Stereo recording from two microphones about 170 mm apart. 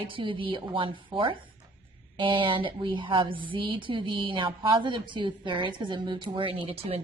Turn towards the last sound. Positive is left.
turn(degrees=-35)  # may be behind; listen again after turning